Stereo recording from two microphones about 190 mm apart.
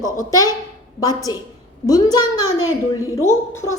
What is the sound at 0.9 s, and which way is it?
A woman's voice, 20° left (ahead or behind).